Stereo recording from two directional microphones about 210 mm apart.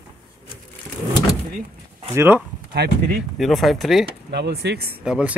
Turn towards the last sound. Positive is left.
turn(degrees=-5)  # may be behind; listen again after turning